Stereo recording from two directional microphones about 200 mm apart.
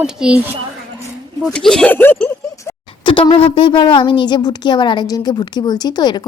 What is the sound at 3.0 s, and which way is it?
A woman's voice, 25° left (ahead or behind).